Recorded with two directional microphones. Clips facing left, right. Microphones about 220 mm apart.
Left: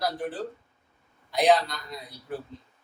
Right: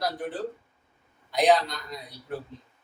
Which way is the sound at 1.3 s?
Centre (ahead or behind).